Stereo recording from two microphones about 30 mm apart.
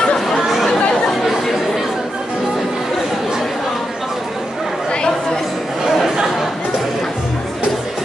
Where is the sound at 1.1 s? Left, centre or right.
Centre.